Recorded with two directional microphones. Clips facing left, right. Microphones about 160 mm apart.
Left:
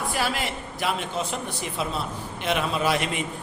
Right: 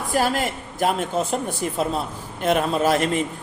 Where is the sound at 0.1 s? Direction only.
45° right (ahead or behind).